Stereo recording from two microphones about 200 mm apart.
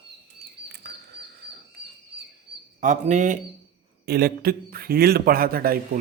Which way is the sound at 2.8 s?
40° right (ahead or behind).